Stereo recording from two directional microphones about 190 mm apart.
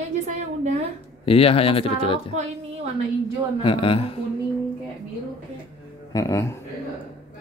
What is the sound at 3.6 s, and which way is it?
Speech, 30° left (ahead or behind).